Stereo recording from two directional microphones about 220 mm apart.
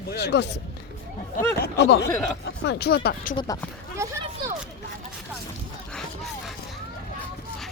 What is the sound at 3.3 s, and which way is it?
Speech, 15° left (ahead or behind).